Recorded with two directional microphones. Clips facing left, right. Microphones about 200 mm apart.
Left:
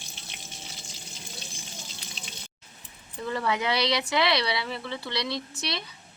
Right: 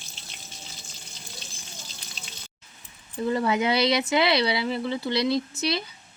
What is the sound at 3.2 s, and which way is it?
Speech, 25° right (ahead or behind).